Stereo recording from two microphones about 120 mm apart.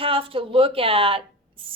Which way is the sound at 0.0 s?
50° right (ahead or behind).